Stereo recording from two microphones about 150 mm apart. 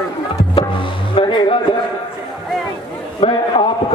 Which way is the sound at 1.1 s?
30° left (ahead or behind).